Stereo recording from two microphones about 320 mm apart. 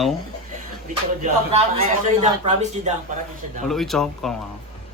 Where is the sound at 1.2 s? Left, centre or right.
Right.